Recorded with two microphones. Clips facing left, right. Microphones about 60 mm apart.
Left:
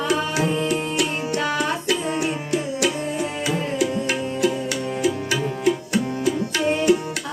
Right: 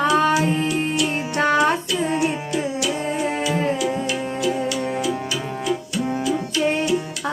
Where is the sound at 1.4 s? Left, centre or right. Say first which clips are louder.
Right 8 dB; right.